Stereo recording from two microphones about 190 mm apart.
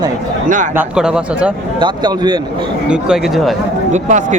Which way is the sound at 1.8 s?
20° right (ahead or behind).